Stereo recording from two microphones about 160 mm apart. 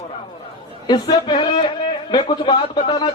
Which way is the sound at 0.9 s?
25° left (ahead or behind).